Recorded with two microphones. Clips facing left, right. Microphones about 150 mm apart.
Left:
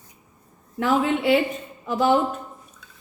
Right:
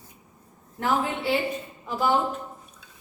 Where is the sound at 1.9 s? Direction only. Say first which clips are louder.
Left 5 dB; 75° left (ahead or behind).